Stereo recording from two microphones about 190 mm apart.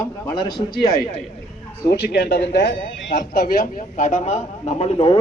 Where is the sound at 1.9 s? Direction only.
55° left (ahead or behind); by 5.1 s 30° left (ahead or behind).